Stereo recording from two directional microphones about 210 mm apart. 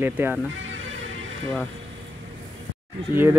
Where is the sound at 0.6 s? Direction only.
65° right (ahead or behind).